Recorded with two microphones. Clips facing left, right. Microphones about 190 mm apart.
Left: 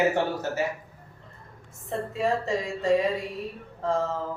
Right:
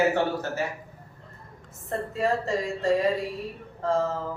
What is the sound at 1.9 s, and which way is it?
A woman's voice, centre (ahead or behind).